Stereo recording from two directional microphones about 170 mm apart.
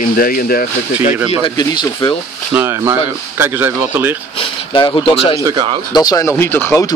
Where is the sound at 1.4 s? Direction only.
25° left (ahead or behind).